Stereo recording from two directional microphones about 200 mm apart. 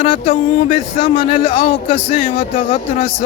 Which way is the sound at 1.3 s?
25° left (ahead or behind).